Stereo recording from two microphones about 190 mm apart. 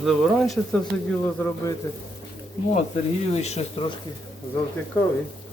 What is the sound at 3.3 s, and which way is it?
Speech, 35° left (ahead or behind).